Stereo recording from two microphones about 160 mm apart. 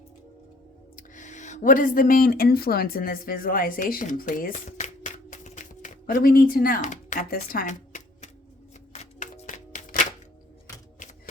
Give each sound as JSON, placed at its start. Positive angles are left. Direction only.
{"t": 0.9, "sound": "speech", "side_deg": 50}
{"t": 8.9, "sound": "music", "side_deg": 45}